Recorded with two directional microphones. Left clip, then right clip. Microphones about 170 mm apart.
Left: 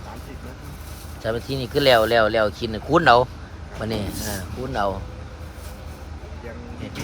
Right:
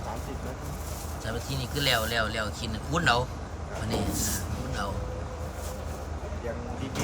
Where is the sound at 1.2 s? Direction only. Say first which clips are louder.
Left 10 dB; 10° left (ahead or behind).